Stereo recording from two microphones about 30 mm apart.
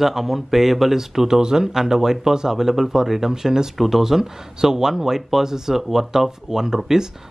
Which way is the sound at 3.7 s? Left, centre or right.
Centre.